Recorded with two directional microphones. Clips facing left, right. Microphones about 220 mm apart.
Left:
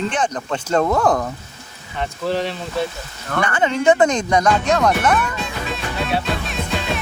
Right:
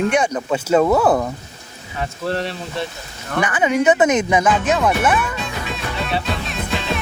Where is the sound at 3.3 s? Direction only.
10° right (ahead or behind).